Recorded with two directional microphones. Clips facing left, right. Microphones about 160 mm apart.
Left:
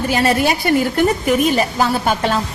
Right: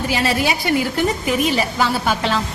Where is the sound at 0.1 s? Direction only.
50° left (ahead or behind).